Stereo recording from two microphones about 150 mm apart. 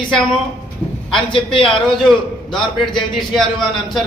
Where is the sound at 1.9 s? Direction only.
Centre (ahead or behind).